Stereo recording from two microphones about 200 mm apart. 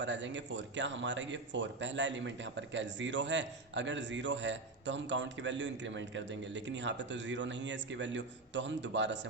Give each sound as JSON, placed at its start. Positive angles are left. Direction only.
{"t": 0.0, "sound": "speech", "side_deg": -65}